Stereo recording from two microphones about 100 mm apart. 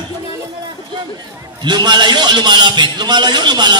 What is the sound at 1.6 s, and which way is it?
A man's voice, 45° right (ahead or behind).